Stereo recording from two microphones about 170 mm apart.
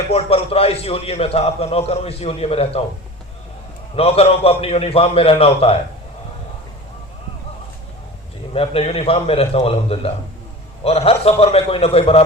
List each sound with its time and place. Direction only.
0.1 s a man's voice: 35° left (ahead or behind)
3.9 s a man's voice: 35° left (ahead or behind)
8.5 s a man's voice: 35° left (ahead or behind)